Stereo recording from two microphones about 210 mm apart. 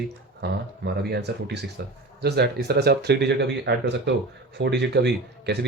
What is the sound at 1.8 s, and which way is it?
Speech, 50° right (ahead or behind).